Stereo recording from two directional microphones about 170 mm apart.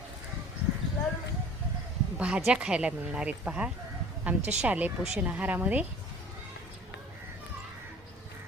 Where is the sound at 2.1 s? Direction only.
5° right (ahead or behind).